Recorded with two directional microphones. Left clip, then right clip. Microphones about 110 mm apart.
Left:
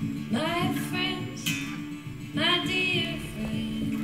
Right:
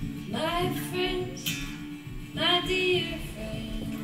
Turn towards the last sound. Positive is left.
turn(degrees=25)  # may be behind; listen again after turning